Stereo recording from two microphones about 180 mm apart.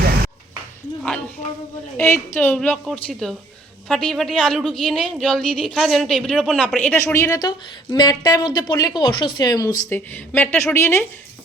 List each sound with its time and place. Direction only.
2.0 s a woman's voice: 15° left (ahead or behind)